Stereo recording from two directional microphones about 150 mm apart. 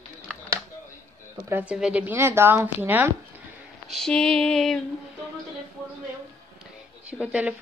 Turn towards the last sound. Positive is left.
turn(degrees=-10)  # may be behind; listen again after turning